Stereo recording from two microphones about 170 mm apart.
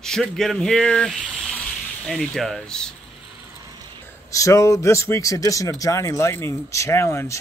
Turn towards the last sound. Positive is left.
turn(degrees=15)  # may be behind; listen again after turning